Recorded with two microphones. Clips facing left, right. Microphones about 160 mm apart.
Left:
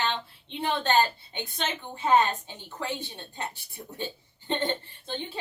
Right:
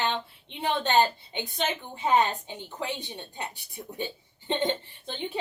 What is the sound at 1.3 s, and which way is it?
A woman's voice, 15° right (ahead or behind).